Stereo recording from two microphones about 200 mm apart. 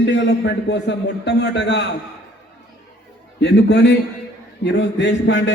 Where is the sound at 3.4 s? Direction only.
60° left (ahead or behind).